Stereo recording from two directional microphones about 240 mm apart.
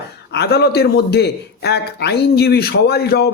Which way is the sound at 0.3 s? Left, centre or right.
Left.